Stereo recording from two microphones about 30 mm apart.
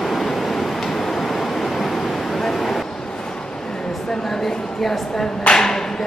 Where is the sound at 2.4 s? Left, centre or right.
Centre.